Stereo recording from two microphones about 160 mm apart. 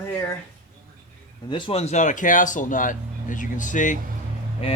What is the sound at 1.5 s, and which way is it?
Speech, 30° left (ahead or behind).